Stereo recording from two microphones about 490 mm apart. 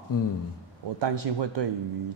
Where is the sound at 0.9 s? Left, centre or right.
Right.